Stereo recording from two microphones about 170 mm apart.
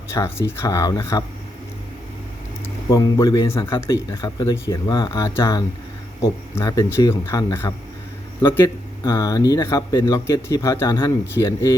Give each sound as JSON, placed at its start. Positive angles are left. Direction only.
{"t": 0.1, "sound": "speech", "side_deg": 15}
{"t": 2.9, "sound": "speech", "side_deg": 20}